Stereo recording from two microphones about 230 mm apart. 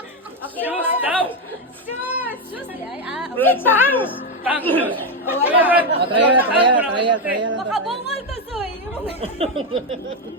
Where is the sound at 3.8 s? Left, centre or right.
Centre.